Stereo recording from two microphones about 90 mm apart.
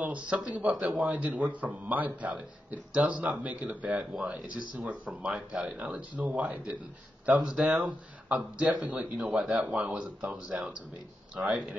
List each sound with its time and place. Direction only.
0.0 s speech: 15° right (ahead or behind)